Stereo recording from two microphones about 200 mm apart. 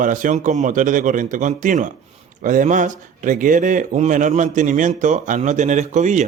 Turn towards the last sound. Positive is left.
turn(degrees=-35)  # may be behind; listen again after turning